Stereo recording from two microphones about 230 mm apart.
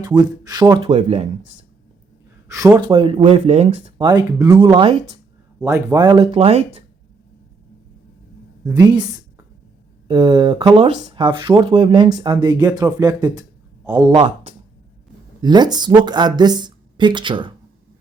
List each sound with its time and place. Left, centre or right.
0.0 s speech: centre
2.5 s speech: centre
8.7 s speech: centre